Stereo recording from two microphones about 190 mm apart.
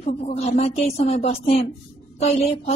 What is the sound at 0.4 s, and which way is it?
A woman's voice, 35° left (ahead or behind).